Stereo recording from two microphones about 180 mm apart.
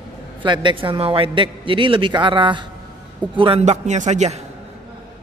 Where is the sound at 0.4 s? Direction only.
25° right (ahead or behind).